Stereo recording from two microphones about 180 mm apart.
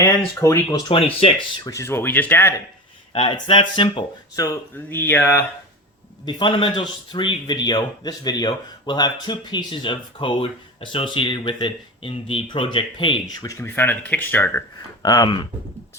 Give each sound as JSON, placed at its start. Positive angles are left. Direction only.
{"t": 0.0, "sound": "a man's voice", "side_deg": 15}
{"t": 1.6, "sound": "speech", "side_deg": 15}
{"t": 3.1, "sound": "a man's voice", "side_deg": 25}
{"t": 6.2, "sound": "a man's voice", "side_deg": 25}
{"t": 15.0, "sound": "a man's voice", "side_deg": 20}